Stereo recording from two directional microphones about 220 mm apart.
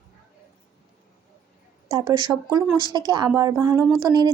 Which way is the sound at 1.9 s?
15° right (ahead or behind).